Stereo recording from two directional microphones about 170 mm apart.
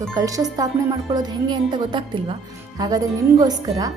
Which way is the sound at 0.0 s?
20° right (ahead or behind).